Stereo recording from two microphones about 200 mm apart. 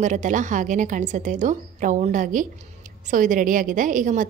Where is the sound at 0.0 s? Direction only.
40° right (ahead or behind).